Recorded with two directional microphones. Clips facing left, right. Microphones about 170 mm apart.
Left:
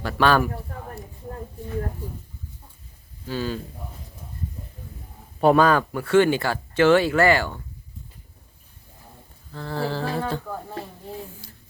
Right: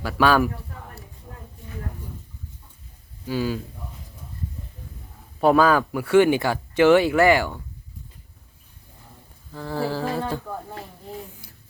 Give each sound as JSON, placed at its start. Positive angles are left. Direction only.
{"t": 0.0, "sound": "speech", "side_deg": -5}
{"t": 3.2, "sound": "speech", "side_deg": -10}
{"t": 5.4, "sound": "speech", "side_deg": 0}
{"t": 9.5, "sound": "speech", "side_deg": -10}
{"t": 11.2, "sound": "a sound", "side_deg": -15}